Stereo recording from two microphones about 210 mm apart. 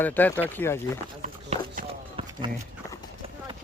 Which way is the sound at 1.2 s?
35° right (ahead or behind).